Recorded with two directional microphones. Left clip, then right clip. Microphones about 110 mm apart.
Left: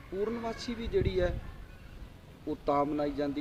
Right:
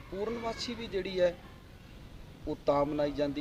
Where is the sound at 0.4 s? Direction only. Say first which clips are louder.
Right 1 dB; 15° left (ahead or behind).